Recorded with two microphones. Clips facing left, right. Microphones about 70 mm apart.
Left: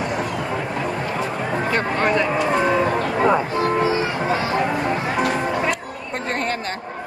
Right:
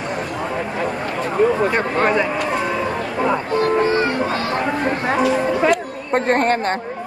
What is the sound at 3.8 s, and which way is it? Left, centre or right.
Music, right.